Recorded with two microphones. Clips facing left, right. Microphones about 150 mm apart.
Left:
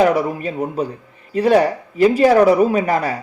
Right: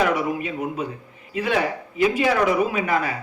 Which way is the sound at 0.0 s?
35° left (ahead or behind).